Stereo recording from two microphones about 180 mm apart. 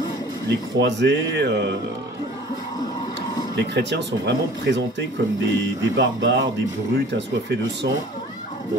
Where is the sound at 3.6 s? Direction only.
75° right (ahead or behind).